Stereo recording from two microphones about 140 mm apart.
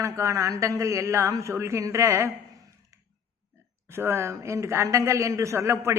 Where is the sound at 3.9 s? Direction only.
15° right (ahead or behind).